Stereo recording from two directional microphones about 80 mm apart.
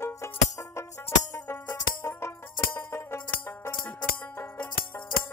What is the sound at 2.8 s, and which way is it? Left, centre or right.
Music, left.